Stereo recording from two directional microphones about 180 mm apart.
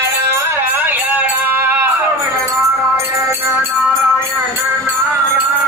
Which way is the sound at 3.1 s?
15° right (ahead or behind).